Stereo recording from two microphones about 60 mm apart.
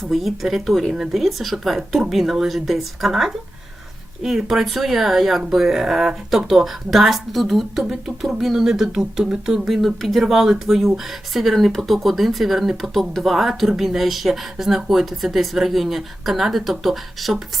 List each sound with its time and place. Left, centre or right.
0.0 s speech: centre